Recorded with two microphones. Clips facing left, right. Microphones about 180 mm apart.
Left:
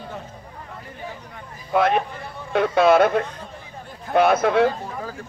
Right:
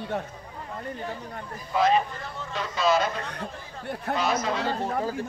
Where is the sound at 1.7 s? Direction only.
60° left (ahead or behind).